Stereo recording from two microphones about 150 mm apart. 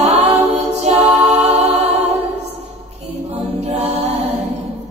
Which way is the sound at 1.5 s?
45° right (ahead or behind).